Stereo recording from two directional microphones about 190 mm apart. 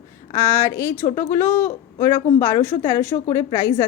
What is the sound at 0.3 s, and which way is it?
A woman's voice, 15° left (ahead or behind).